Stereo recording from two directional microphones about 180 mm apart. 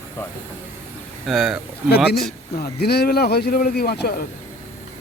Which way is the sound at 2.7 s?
65° left (ahead or behind).